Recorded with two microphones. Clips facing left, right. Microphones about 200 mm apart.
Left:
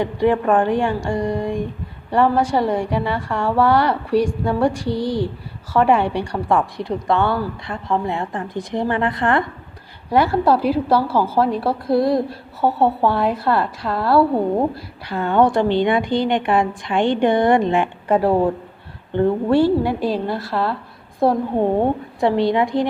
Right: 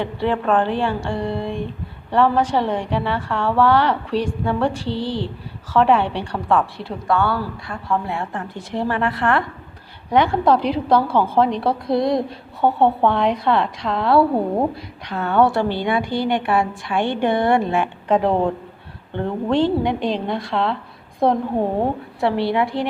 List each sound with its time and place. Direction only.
0.0 s a woman's voice: 15° left (ahead or behind)
10.1 s a woman's voice: 5° left (ahead or behind)
22.2 s a woman's voice: 15° left (ahead or behind)